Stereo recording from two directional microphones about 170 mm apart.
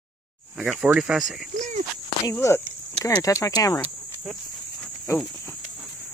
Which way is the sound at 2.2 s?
15° left (ahead or behind).